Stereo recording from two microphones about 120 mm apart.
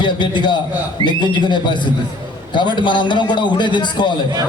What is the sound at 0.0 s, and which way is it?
A man's voice, 40° left (ahead or behind).